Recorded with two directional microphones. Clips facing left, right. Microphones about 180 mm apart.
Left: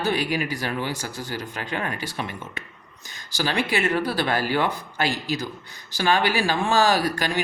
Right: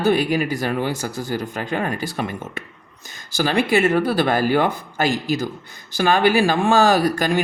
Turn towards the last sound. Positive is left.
turn(degrees=-50)  # may be behind; listen again after turning